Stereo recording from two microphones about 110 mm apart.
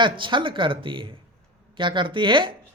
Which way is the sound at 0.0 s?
45° right (ahead or behind).